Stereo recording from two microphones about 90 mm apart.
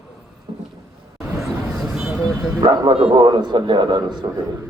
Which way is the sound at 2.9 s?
90° right.